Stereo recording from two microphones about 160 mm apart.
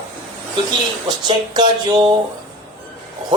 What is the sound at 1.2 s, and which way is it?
Speech, 25° right (ahead or behind).